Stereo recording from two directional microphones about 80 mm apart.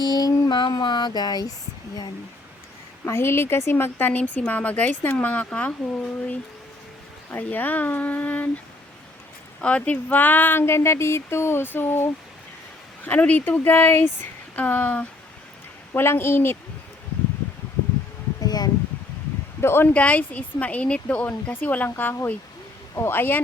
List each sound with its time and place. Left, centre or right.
0.0 s music: left
0.6 s speech: left
3.1 s a woman's voice: left
9.6 s a woman's voice: centre
15.9 s a woman's voice: left
18.4 s a sound: left
19.6 s a woman's voice: left
19.9 s a woman's voice: centre